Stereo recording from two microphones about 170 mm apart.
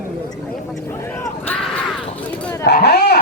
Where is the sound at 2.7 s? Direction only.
70° left (ahead or behind).